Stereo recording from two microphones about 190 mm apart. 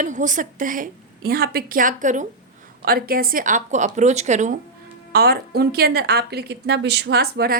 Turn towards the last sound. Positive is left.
turn(degrees=-55)  # may be behind; listen again after turning